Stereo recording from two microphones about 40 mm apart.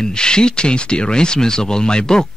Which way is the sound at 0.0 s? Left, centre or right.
Centre.